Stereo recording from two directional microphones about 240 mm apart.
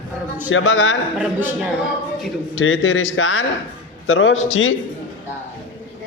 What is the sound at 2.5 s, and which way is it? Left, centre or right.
A man's voice, left.